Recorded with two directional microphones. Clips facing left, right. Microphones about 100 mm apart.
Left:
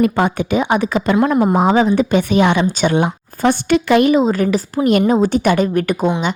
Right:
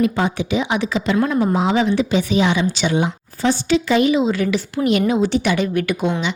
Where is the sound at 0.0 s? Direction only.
55° left (ahead or behind).